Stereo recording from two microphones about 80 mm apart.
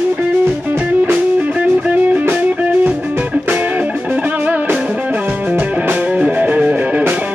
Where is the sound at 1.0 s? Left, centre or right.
Centre.